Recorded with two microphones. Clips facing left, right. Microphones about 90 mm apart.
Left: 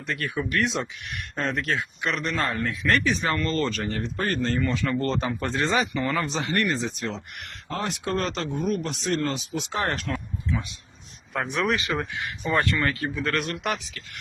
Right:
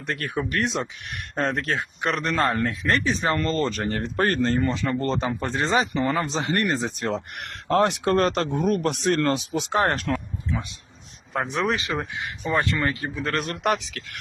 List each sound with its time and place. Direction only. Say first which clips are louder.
0.0 s speech: right 1 dB; 50° right (ahead or behind); by 3.8 s 30° right (ahead or behind)
3.8 s speech: right 4 dB; 50° right (ahead or behind)
4.7 s speech: right 1 dB; 20° right (ahead or behind); by 10.1 s 45° right (ahead or behind)
11.5 s speech: even; 30° right (ahead or behind)
13.4 s speech: right 4 dB; 40° right (ahead or behind)
13.7 s speech: right 5 dB; 80° right